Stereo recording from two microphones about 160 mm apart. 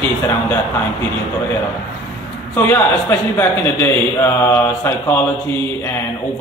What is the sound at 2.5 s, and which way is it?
A man's voice, 15° left (ahead or behind).